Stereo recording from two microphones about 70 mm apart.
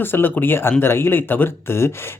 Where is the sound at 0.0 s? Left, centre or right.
Left.